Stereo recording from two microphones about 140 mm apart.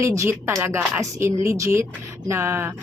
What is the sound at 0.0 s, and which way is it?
Speech, 20° right (ahead or behind).